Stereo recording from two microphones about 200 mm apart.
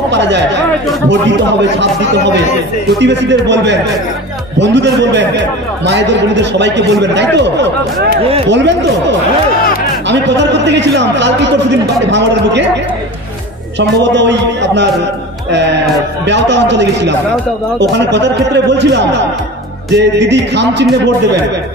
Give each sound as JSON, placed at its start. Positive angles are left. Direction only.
{"t": 0.1, "sound": "chatter", "side_deg": -60}
{"t": 3.0, "sound": "a man's voice", "side_deg": -60}
{"t": 10.0, "sound": "a man's voice", "side_deg": -60}
{"t": 13.7, "sound": "a man's voice", "side_deg": -60}